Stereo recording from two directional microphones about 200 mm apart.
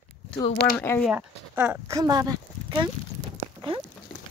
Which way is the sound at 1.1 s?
5° right (ahead or behind).